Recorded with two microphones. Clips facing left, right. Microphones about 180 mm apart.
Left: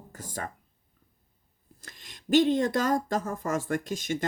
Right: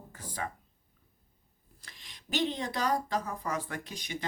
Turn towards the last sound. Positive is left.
turn(degrees=45)  # may be behind; listen again after turning